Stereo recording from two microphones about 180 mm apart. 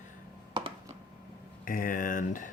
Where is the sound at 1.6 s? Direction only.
50° left (ahead or behind).